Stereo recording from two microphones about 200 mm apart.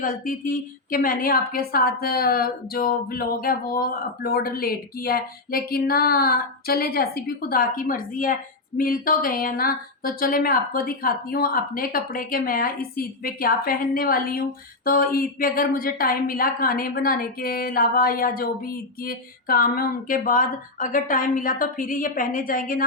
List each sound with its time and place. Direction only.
0.0 s a woman's voice: 45° left (ahead or behind)